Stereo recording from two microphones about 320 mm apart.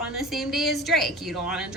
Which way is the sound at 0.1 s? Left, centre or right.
Centre.